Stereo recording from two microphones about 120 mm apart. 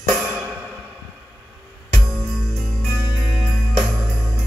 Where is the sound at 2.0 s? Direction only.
Centre (ahead or behind).